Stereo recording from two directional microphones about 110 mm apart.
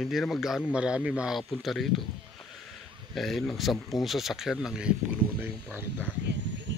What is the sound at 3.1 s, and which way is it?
Speech, centre (ahead or behind).